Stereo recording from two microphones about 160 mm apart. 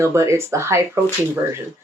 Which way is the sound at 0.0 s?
15° right (ahead or behind).